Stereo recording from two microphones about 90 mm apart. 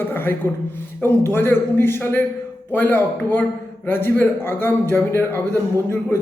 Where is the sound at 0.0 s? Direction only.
25° left (ahead or behind).